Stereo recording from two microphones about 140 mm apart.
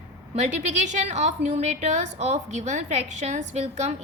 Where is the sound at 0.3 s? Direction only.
55° right (ahead or behind).